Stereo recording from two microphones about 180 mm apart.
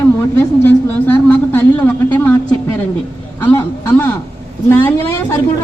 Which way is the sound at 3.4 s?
10° left (ahead or behind).